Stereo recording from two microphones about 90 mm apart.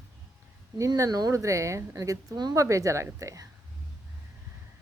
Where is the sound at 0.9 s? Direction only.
45° right (ahead or behind).